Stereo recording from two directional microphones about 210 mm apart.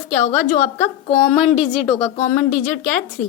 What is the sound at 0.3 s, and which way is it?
Speech, 35° left (ahead or behind).